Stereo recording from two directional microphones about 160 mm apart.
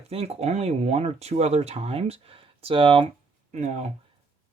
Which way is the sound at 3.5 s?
45° right (ahead or behind).